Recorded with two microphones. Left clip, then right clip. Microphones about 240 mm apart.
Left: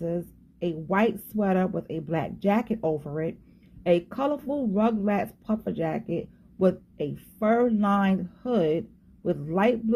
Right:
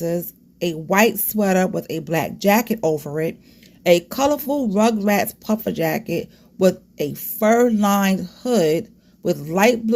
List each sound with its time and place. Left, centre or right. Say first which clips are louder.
0.0 s a woman's voice: right 7 dB; right